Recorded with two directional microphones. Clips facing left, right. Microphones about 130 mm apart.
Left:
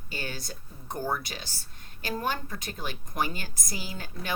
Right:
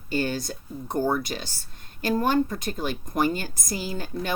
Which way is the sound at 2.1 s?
45° right (ahead or behind).